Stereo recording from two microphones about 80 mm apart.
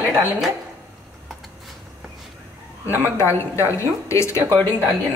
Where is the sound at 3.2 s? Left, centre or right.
Left.